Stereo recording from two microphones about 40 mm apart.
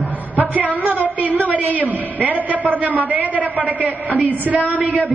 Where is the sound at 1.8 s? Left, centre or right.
Right.